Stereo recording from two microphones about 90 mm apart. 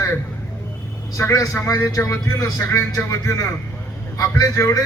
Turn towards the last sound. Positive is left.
turn(degrees=40)  # may be behind; listen again after turning